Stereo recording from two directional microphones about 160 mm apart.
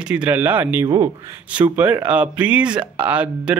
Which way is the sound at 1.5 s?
10° right (ahead or behind).